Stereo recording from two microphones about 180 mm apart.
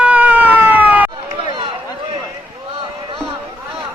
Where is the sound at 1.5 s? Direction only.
30° right (ahead or behind).